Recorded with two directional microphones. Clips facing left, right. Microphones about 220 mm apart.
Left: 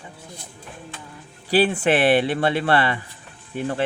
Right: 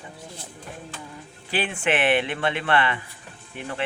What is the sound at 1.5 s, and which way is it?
Speech, 35° left (ahead or behind).